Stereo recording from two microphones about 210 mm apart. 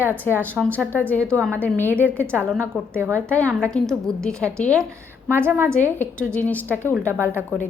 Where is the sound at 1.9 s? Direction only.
10° right (ahead or behind).